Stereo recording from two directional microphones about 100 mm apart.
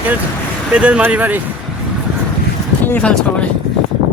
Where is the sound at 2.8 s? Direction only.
15° left (ahead or behind).